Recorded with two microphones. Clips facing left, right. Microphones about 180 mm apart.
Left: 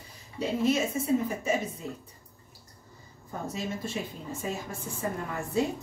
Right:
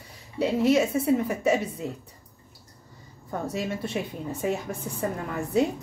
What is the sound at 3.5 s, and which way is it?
A woman's voice, 65° right (ahead or behind).